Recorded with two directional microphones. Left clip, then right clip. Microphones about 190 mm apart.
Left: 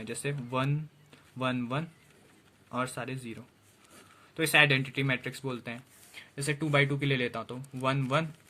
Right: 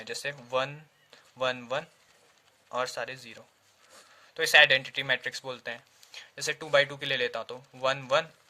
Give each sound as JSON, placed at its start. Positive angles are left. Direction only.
{"t": 0.0, "sound": "speech", "side_deg": -45}